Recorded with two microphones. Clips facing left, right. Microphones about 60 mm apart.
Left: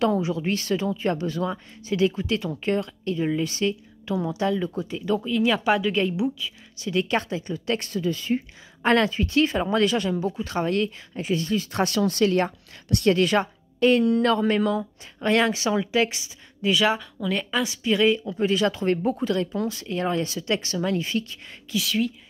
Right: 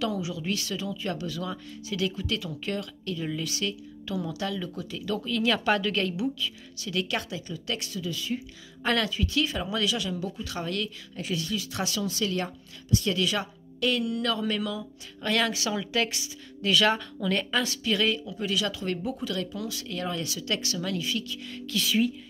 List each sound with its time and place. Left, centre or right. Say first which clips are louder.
0.0 s a woman's voice: left 7 dB; left
12.8 s a woman's voice: left 6 dB; left
15.1 s speech: left 6 dB; left; by 17.7 s centre
17.8 s a woman's voice: left 6 dB; left
21.7 s speech: left 1 dB; centre